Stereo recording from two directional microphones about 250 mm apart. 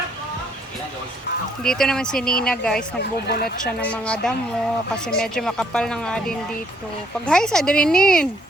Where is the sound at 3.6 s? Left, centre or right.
Centre.